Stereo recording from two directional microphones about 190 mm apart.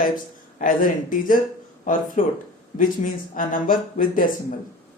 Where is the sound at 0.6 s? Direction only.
45° left (ahead or behind).